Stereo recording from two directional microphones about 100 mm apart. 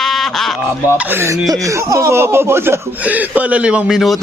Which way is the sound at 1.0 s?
20° right (ahead or behind).